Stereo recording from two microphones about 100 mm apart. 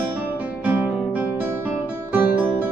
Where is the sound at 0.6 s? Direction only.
15° right (ahead or behind).